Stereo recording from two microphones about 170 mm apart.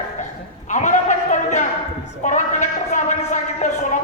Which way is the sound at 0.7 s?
45° left (ahead or behind).